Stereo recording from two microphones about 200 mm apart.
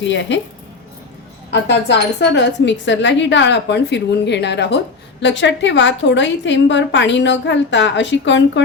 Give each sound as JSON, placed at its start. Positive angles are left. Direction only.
{"t": 0.0, "sound": "a woman's voice", "side_deg": 65}
{"t": 1.6, "sound": "a woman's voice", "side_deg": 60}